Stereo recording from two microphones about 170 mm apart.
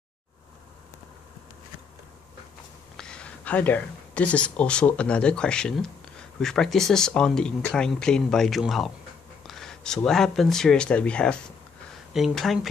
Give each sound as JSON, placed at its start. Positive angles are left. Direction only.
{"t": 3.0, "sound": "speech", "side_deg": 5}